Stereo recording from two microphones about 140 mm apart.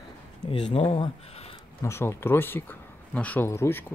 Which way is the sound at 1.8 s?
20° left (ahead or behind).